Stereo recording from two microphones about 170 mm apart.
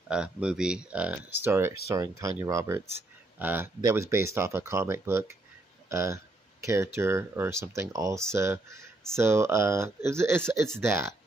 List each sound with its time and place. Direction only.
0.1 s speech: 5° right (ahead or behind)